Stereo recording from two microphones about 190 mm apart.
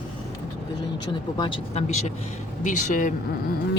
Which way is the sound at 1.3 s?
25° left (ahead or behind).